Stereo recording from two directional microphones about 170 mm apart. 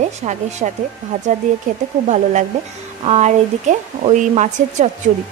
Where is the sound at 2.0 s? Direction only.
45° right (ahead or behind).